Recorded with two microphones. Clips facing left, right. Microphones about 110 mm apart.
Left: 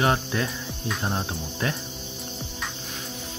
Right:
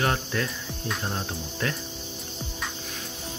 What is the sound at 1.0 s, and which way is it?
Speech, 25° left (ahead or behind).